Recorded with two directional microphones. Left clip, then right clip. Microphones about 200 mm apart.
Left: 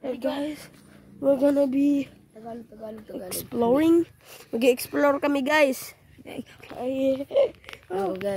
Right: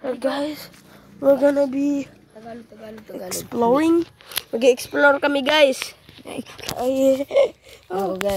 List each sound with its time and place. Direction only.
0.0 s speech: 5° right (ahead or behind)
1.4 s speech: 10° left (ahead or behind)
3.3 s speech: centre (ahead or behind)
4.5 s speech: 20° left (ahead or behind)
6.3 s speech: 5° right (ahead or behind)
6.8 s speech: 25° right (ahead or behind)
7.9 s speech: 10° right (ahead or behind)